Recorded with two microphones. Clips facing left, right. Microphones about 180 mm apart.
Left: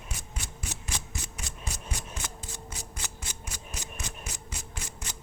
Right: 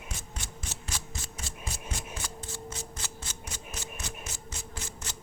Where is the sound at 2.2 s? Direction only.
15° left (ahead or behind).